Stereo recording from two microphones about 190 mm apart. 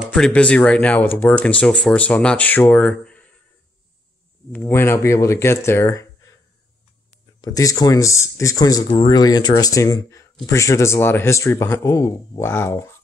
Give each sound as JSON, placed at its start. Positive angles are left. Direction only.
{"t": 0.0, "sound": "speech", "side_deg": 5}
{"t": 4.5, "sound": "speech", "side_deg": 10}
{"t": 7.4, "sound": "speech", "side_deg": 20}